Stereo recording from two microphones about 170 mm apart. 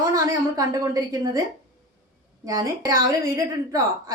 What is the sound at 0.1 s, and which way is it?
A woman's voice, 20° right (ahead or behind).